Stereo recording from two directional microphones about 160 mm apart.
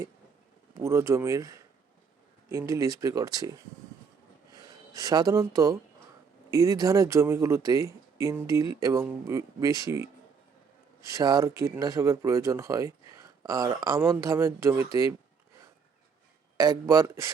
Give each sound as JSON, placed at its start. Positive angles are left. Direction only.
{"t": 0.7, "sound": "speech", "side_deg": -15}
{"t": 4.5, "sound": "speech", "side_deg": -25}
{"t": 11.1, "sound": "speech", "side_deg": -20}
{"t": 16.6, "sound": "speech", "side_deg": -20}